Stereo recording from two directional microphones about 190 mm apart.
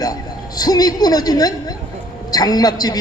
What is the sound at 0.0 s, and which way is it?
A man's voice, 20° left (ahead or behind).